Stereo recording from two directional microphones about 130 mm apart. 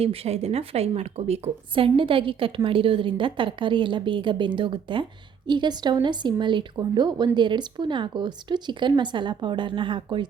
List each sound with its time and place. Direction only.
0.0 s a woman's voice: 50° right (ahead or behind)